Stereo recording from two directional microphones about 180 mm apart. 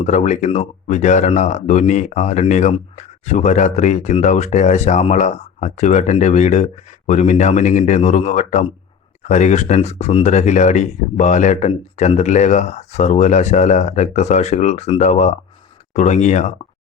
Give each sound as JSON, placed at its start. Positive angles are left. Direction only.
{"t": 0.0, "sound": "speech", "side_deg": 40}